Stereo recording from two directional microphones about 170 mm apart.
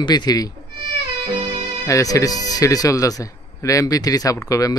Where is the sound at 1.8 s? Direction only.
20° left (ahead or behind).